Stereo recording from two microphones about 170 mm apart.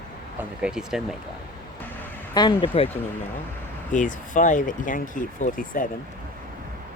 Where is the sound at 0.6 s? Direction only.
5° right (ahead or behind).